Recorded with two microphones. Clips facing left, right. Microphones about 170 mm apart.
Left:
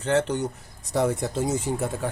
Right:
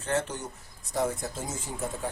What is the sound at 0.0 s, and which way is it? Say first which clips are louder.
Speech: left 7 dB; 65° left (ahead or behind).